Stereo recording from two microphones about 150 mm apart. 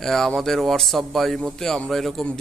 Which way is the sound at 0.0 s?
Centre (ahead or behind).